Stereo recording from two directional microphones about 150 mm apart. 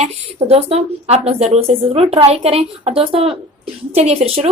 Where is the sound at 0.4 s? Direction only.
45° right (ahead or behind).